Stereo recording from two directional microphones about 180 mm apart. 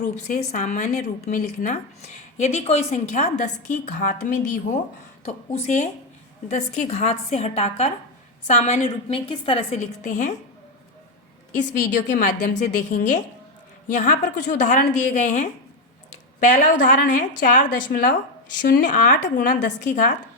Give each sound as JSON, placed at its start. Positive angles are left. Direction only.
{"t": 0.0, "sound": "a woman's voice", "side_deg": 40}
{"t": 11.9, "sound": "a woman's voice", "side_deg": 45}